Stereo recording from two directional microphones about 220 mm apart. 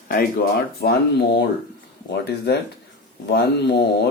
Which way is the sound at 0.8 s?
45° left (ahead or behind).